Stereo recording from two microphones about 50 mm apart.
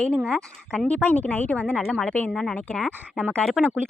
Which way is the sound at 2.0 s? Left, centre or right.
Left.